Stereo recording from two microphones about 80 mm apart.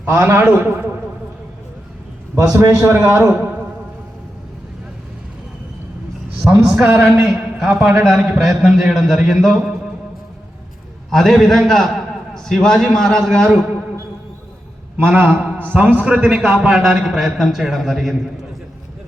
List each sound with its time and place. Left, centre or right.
0.0 s a man's voice: right
2.3 s a man's voice: right
2.8 s a man's voice: right
6.4 s a man's voice: centre
7.0 s a man's voice: centre
11.1 s a man's voice: centre
14.9 s a man's voice: right; by 18.1 s centre